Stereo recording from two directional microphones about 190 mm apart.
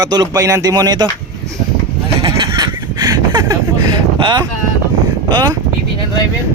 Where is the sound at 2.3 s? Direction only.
20° right (ahead or behind).